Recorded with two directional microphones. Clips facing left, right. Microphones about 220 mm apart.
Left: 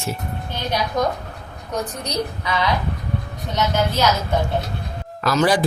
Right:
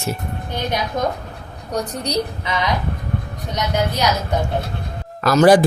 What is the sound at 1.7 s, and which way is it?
Speech, 35° right (ahead or behind).